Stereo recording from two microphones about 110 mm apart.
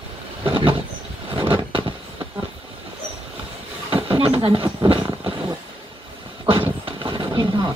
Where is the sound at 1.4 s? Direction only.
50° right (ahead or behind).